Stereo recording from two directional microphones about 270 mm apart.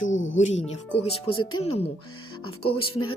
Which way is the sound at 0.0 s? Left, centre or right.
Left.